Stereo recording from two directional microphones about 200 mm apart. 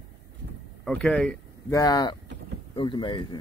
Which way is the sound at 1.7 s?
20° left (ahead or behind).